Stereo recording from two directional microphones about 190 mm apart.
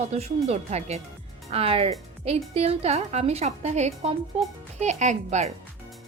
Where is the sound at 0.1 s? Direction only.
35° right (ahead or behind).